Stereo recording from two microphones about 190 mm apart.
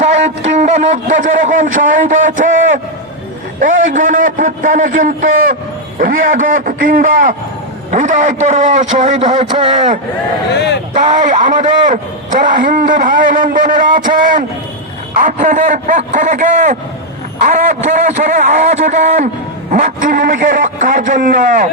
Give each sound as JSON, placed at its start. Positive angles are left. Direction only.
{"t": 0.0, "sound": "a man's voice", "side_deg": -40}
{"t": 3.8, "sound": "a man's voice", "side_deg": -45}
{"t": 10.5, "sound": "speech", "side_deg": 65}
{"t": 10.9, "sound": "a man's voice", "side_deg": -40}